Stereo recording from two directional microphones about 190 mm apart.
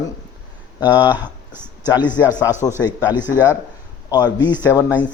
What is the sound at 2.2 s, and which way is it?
Speech, 15° left (ahead or behind).